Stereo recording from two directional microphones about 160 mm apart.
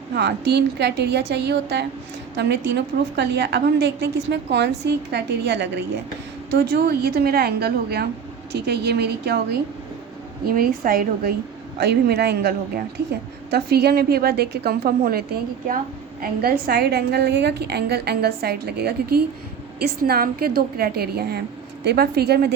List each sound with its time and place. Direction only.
0.1 s a woman's voice: 90° right
8.5 s a woman's voice: 90° right
10.4 s a woman's voice: 65° right (ahead or behind)
11.8 s a woman's voice: 90° right
13.5 s a woman's voice: 80° right
16.2 s a woman's voice: 70° right (ahead or behind); by 22.5 s 90° right